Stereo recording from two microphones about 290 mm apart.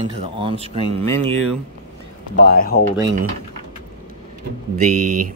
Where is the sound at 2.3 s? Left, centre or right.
Left.